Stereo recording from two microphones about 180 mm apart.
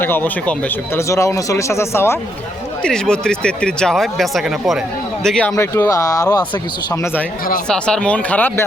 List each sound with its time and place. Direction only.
0.0 s speech: 10° left (ahead or behind)